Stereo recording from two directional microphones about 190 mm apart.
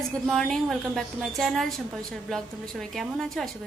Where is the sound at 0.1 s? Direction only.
5° left (ahead or behind).